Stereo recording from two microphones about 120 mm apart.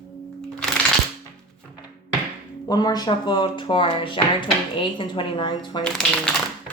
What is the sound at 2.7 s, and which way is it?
Speech, 35° left (ahead or behind).